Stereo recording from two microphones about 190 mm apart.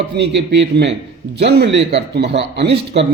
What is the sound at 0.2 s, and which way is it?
A man's voice, 65° right (ahead or behind).